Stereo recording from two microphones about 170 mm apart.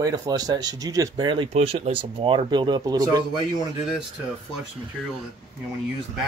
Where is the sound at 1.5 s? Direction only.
40° right (ahead or behind); by 3.4 s 25° right (ahead or behind).